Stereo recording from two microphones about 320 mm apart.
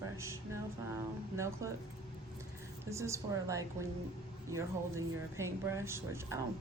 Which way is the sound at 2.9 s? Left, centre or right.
Centre.